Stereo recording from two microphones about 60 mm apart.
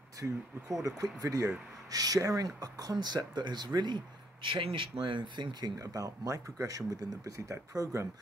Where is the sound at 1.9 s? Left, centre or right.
Right.